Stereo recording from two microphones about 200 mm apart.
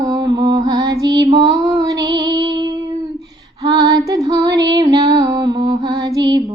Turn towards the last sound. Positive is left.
turn(degrees=-20)  # may be behind; listen again after turning